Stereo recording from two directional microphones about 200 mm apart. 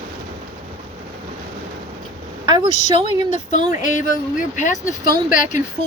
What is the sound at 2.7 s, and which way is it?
Speech, 35° left (ahead or behind).